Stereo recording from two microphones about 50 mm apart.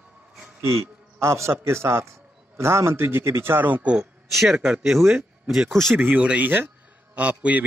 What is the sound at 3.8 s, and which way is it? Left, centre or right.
Speech, right.